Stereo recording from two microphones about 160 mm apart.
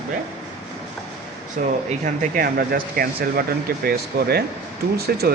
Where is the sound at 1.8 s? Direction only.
50° right (ahead or behind); by 5.3 s 80° right.